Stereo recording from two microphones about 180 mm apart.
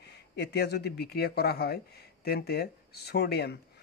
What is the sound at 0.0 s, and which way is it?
Speech, 65° left (ahead or behind).